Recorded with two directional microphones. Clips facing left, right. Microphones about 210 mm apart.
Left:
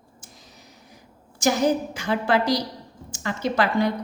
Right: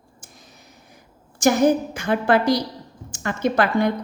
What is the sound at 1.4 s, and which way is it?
A woman's voice, 50° right (ahead or behind).